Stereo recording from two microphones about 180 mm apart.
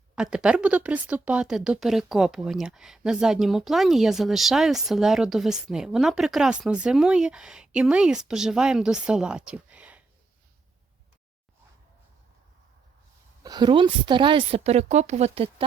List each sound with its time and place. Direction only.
0.2 s speech: 5° right (ahead or behind)
13.4 s a woman's voice: 25° right (ahead or behind)